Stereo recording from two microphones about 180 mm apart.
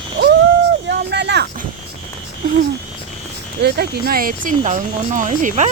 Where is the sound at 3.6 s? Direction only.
60° right (ahead or behind); by 5.6 s 45° right (ahead or behind).